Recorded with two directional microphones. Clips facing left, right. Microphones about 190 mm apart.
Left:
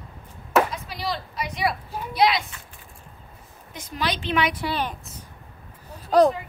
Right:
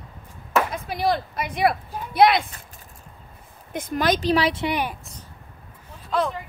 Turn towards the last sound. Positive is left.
turn(degrees=40)  # may be behind; listen again after turning